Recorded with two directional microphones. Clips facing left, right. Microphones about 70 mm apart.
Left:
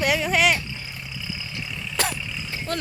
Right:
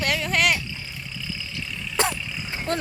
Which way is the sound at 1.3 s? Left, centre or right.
Centre.